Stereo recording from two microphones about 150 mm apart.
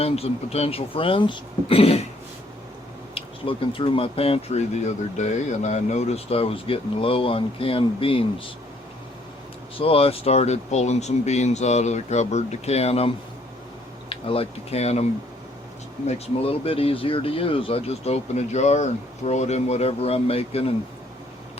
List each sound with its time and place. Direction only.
0.0 s speech: 40° left (ahead or behind)
3.2 s speech: 35° left (ahead or behind)
9.7 s speech: 40° left (ahead or behind)
14.1 s speech: 40° left (ahead or behind)
16.0 s speech: 45° left (ahead or behind)